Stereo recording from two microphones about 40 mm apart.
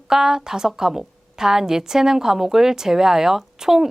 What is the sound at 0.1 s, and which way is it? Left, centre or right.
A woman's voice, centre.